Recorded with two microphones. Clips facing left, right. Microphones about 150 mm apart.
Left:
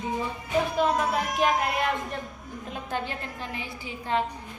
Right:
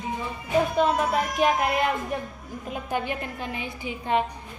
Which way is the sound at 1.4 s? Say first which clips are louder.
Right 2 dB; centre (ahead or behind).